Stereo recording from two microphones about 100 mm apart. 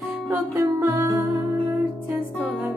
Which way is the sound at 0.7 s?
25° right (ahead or behind).